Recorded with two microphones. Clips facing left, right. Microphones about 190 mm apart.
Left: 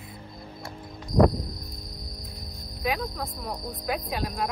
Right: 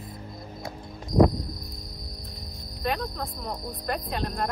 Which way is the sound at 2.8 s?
Centre (ahead or behind).